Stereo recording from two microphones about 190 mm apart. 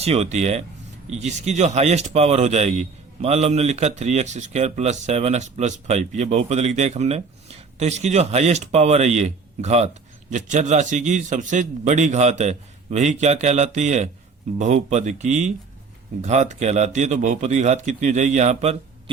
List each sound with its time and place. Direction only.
0.0 s speech: 35° right (ahead or behind)